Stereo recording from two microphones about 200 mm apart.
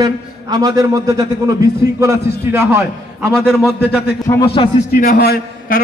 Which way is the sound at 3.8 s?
55° left (ahead or behind).